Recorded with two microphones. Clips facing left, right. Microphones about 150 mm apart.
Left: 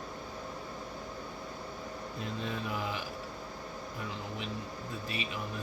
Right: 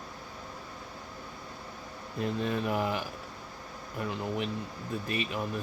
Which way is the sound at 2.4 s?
60° right (ahead or behind).